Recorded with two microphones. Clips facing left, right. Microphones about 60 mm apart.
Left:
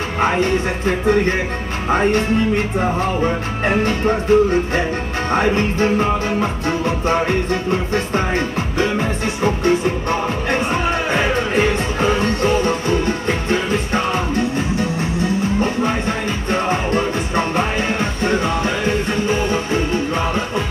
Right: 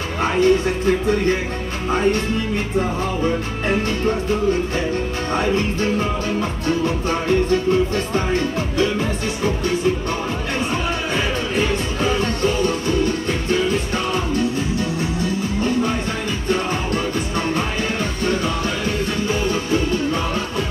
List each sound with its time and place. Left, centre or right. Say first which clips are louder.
0.2 s music: right 1 dB; left